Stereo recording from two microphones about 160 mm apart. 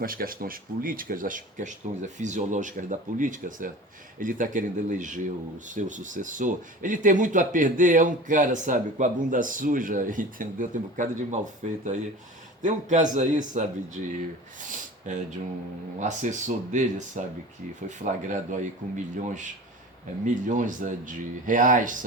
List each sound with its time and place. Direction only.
0.0 s speech: 65° right (ahead or behind)
14.7 s speech: 50° right (ahead or behind)